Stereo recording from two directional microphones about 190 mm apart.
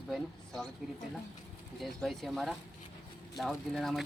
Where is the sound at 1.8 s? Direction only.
Centre (ahead or behind).